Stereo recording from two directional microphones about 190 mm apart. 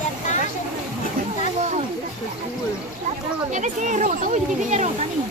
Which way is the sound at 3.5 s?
40° right (ahead or behind).